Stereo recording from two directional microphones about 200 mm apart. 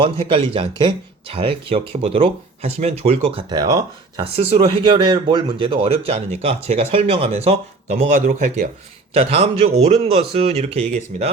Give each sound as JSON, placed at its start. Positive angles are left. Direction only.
{"t": 0.3, "sound": "speech", "side_deg": -25}
{"t": 4.4, "sound": "speech", "side_deg": -30}
{"t": 7.9, "sound": "speech", "side_deg": -40}
{"t": 9.1, "sound": "speech", "side_deg": -30}